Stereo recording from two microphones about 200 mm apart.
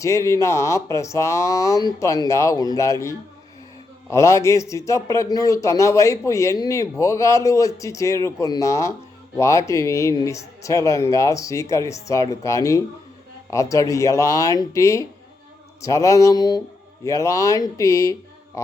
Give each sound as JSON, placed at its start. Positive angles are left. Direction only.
{"t": 0.0, "sound": "speech", "side_deg": 15}